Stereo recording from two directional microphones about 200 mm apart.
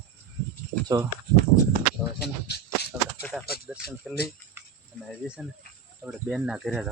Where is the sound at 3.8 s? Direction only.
50° left (ahead or behind).